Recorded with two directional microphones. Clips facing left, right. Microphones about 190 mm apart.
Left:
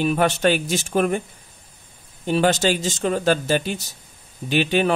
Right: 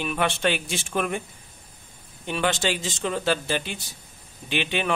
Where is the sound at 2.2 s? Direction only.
40° left (ahead or behind).